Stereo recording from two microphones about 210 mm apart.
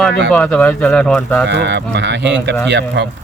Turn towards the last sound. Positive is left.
turn(degrees=-55)  # may be behind; listen again after turning